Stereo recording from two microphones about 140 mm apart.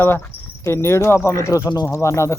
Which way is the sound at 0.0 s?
15° left (ahead or behind).